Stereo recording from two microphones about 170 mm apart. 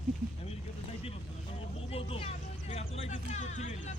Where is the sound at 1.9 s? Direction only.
35° left (ahead or behind).